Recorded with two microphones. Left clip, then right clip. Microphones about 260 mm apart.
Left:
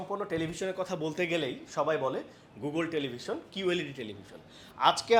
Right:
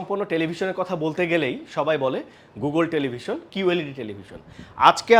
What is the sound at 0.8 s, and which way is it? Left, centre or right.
Speech, centre.